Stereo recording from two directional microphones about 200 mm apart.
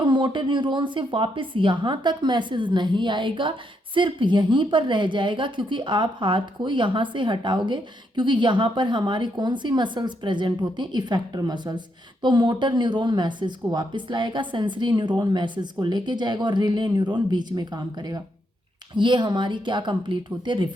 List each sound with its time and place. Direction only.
0.0 s a woman's voice: 25° right (ahead or behind)